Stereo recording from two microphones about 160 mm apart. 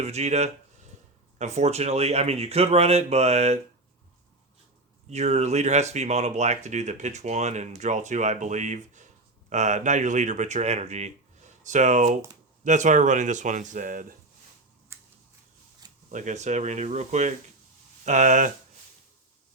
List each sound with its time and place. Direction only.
0.0 s speech: 45° right (ahead or behind)
5.0 s speech: 45° right (ahead or behind)
14.9 s a sound: 15° right (ahead or behind)
16.1 s speech: 50° right (ahead or behind)